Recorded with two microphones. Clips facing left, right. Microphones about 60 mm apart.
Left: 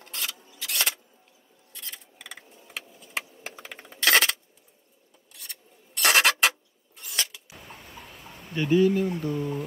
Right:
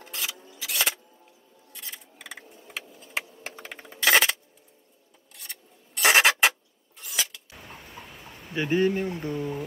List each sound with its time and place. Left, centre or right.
0.0 s a sound: centre
5.3 s filing: centre
7.0 s scissors: centre
7.6 s a sound: centre
8.7 s speech: right
9.3 s speech: centre